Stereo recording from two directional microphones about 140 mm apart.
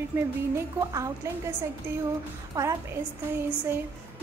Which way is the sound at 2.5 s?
20° right (ahead or behind).